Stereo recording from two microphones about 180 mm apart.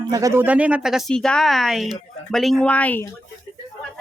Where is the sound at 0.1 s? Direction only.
20° right (ahead or behind).